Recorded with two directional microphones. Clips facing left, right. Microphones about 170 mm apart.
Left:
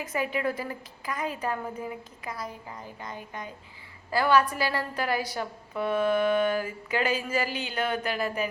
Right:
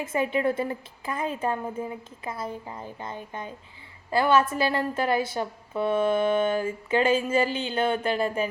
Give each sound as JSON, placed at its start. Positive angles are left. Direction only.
{"t": 0.0, "sound": "a woman's voice", "side_deg": -25}